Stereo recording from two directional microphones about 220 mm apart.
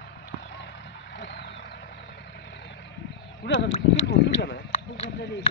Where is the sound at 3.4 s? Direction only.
50° left (ahead or behind).